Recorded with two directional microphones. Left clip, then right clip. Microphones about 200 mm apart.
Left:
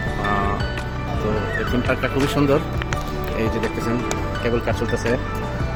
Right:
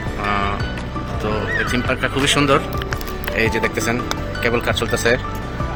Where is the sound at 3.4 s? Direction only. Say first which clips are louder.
Right 6 dB; 15° right (ahead or behind).